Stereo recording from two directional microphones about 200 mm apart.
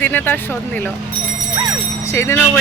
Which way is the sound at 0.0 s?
10° left (ahead or behind).